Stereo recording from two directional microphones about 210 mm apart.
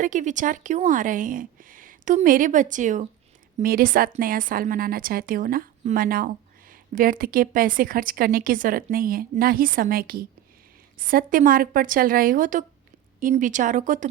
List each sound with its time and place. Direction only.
0.0 s a woman's voice: 35° right (ahead or behind)